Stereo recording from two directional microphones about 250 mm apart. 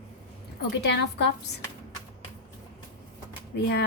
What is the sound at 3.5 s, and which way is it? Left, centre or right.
Speech, left.